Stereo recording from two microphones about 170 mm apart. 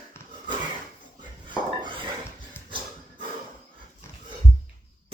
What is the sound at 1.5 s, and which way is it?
Dishes, 30° right (ahead or behind).